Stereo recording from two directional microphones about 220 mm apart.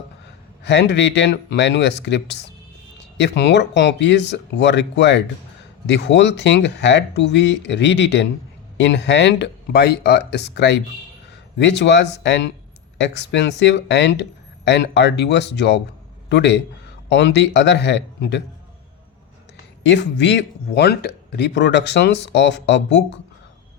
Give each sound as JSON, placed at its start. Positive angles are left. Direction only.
{"t": 0.6, "sound": "speech", "side_deg": 50}
{"t": 19.8, "sound": "speech", "side_deg": 55}